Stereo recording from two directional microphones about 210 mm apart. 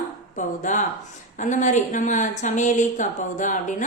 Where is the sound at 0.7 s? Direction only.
35° left (ahead or behind).